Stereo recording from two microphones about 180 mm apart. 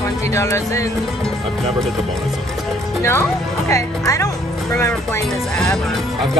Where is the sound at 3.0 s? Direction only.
15° left (ahead or behind).